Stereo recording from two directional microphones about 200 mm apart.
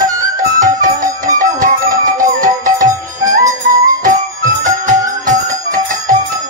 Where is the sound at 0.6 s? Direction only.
40° right (ahead or behind).